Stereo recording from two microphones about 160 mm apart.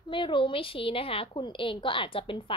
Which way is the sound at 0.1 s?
30° left (ahead or behind).